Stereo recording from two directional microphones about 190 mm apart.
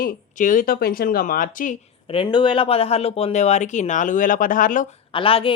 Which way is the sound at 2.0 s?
25° left (ahead or behind).